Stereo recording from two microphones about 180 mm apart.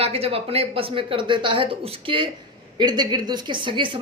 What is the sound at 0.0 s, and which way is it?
Speech, 35° right (ahead or behind).